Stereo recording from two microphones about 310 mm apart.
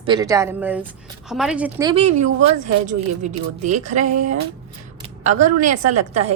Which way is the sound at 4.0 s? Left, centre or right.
Right.